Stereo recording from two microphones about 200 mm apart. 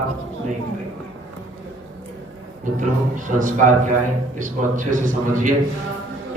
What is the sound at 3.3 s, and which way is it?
A man's voice, 40° right (ahead or behind).